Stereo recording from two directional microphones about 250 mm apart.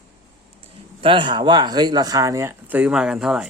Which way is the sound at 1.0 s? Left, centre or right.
Centre.